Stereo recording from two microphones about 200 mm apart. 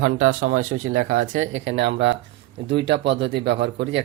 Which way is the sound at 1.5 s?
60° right (ahead or behind).